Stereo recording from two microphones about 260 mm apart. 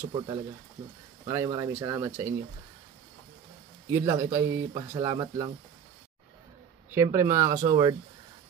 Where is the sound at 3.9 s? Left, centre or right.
Centre.